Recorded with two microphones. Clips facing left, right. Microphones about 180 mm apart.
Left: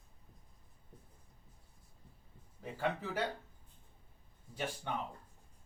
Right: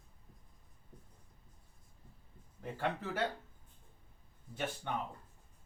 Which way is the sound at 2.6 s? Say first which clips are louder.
Even; 10° left (ahead or behind).